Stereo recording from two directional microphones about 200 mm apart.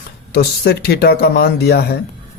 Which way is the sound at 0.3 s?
50° left (ahead or behind).